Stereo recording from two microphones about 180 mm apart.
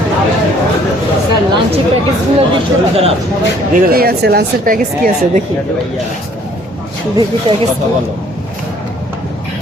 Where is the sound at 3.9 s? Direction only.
60° right (ahead or behind).